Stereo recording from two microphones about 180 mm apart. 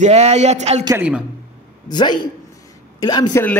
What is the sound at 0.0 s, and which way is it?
Speech, 35° right (ahead or behind).